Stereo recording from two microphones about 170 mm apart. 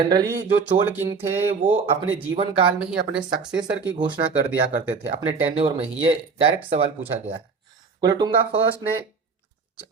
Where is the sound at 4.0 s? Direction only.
25° right (ahead or behind).